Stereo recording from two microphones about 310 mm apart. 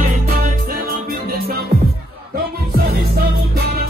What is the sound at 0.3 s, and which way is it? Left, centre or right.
Music, right.